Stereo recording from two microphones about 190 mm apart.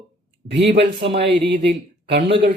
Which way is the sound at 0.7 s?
65° right (ahead or behind).